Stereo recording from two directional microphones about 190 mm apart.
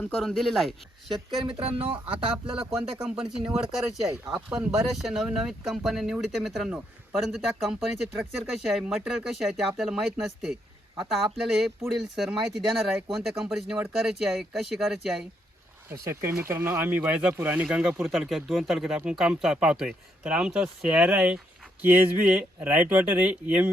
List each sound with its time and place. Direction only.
0.0 s speech: 5° left (ahead or behind)
1.5 s speech: 30° right (ahead or behind)
3.0 s speech: 5° right (ahead or behind)
4.0 s speech: 20° right (ahead or behind)
4.4 s speech: 5° right (ahead or behind)
15.9 s speech: 15° right (ahead or behind)